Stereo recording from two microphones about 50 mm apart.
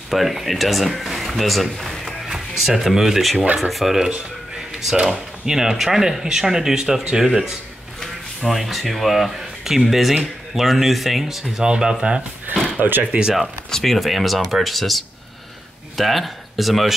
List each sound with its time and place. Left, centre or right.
0.1 s speech: centre
8.5 s speech: centre
11.6 s speech: centre
13.1 s speech: right
13.7 s speech: centre